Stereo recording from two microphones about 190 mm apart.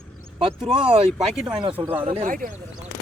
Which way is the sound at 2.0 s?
40° right (ahead or behind).